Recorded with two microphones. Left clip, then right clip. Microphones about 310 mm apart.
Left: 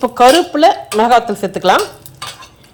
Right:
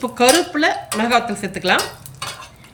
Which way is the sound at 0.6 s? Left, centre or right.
Centre.